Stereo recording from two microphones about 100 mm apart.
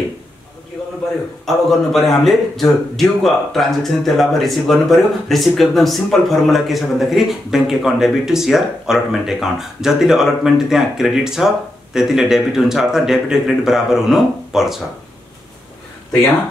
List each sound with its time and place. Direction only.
1.4 s a man's voice: centre (ahead or behind)